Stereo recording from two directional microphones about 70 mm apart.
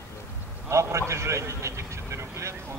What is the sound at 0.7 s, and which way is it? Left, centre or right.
A man's voice, right.